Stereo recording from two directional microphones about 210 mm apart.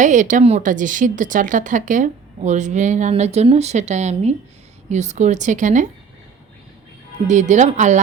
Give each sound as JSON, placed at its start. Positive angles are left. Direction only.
{"t": 0.0, "sound": "speech", "side_deg": -35}
{"t": 7.3, "sound": "speech", "side_deg": -35}